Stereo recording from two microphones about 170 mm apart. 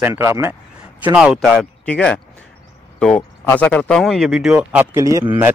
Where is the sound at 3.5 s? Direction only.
10° left (ahead or behind); by 4.9 s 5° right (ahead or behind).